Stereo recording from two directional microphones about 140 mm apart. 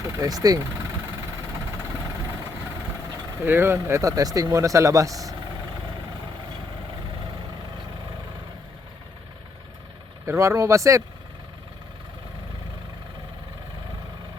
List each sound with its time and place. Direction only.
0.0 s speech: 25° right (ahead or behind)
3.4 s speech: 15° right (ahead or behind)
10.2 s speech: 20° right (ahead or behind)